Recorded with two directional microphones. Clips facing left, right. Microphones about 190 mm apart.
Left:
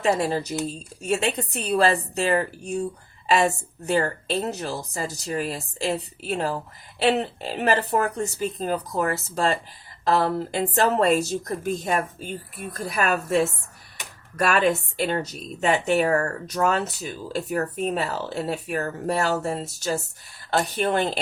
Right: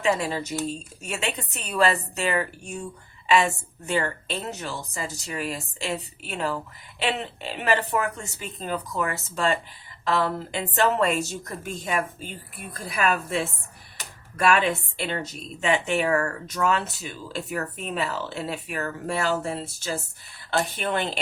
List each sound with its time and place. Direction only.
0.0 s a woman's voice: 35° left (ahead or behind)